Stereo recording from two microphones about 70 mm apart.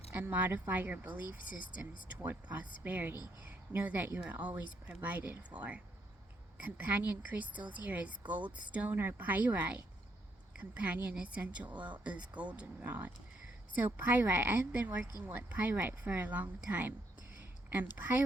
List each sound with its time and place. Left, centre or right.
0.1 s a woman's voice: right
8.9 s a woman's voice: right